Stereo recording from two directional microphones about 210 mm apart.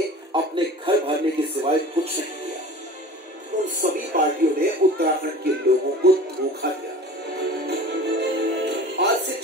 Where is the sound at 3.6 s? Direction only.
40° right (ahead or behind).